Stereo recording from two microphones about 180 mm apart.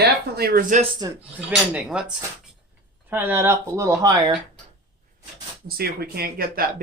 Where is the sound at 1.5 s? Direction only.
5° right (ahead or behind).